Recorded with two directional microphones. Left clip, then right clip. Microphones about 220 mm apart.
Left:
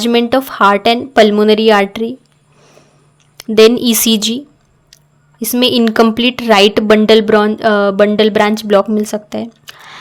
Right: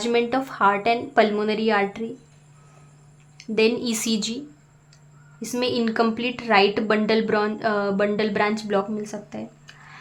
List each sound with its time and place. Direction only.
0.0 s speech: 35° left (ahead or behind)
3.3 s speech: 40° left (ahead or behind)
5.4 s speech: 40° left (ahead or behind)